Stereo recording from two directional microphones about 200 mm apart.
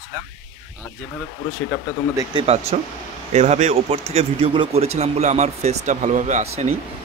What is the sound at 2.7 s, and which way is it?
A man's voice, 30° right (ahead or behind).